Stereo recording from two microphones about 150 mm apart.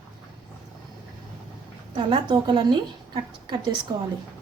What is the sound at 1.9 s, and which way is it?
A woman's voice, 30° right (ahead or behind).